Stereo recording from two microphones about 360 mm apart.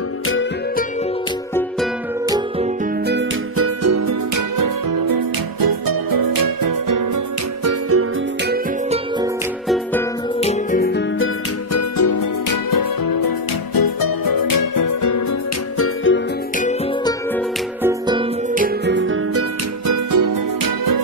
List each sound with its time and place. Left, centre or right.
0.3 s music: left
2.2 s music: centre
3.1 s music: right
7.6 s music: right
10.4 s music: centre
11.7 s music: left
15.8 s music: left
16.5 s music: centre
17.8 s music: centre
18.5 s music: right
19.9 s music: right